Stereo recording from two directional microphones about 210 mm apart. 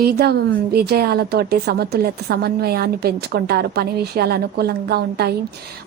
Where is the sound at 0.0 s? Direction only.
50° right (ahead or behind).